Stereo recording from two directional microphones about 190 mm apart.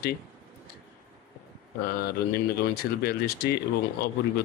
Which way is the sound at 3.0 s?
55° left (ahead or behind).